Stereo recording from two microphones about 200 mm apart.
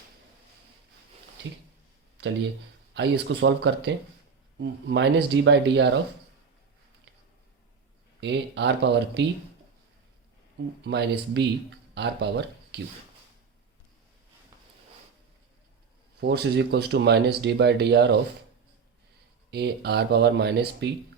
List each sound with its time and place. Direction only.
2.9 s speech: 65° right (ahead or behind)
8.2 s speech: 60° right (ahead or behind)
10.8 s speech: 55° right (ahead or behind)
16.2 s speech: 55° right (ahead or behind)
19.5 s speech: 55° right (ahead or behind)